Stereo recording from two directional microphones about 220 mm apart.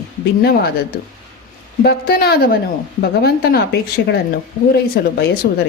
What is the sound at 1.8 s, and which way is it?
A woman's voice, 45° left (ahead or behind).